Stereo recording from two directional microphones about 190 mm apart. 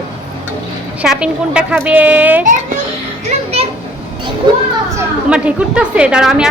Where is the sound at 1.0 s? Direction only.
5° right (ahead or behind).